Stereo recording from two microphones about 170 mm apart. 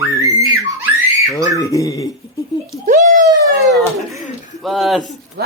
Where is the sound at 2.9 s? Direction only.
50° right (ahead or behind).